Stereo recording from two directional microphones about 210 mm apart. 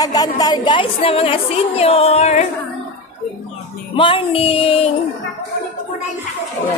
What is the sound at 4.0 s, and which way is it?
Speech, 25° left (ahead or behind).